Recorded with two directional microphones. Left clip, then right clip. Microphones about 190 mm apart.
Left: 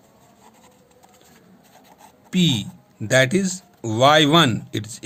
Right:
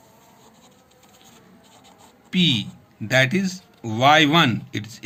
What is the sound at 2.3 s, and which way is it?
Speech, 55° left (ahead or behind).